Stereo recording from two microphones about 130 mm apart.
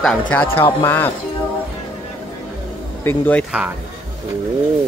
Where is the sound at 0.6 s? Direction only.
15° left (ahead or behind).